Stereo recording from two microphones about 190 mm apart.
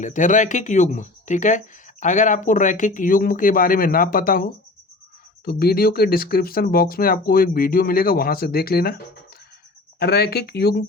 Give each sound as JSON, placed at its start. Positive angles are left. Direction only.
{"t": 0.0, "sound": "speech", "side_deg": 40}
{"t": 10.0, "sound": "speech", "side_deg": 55}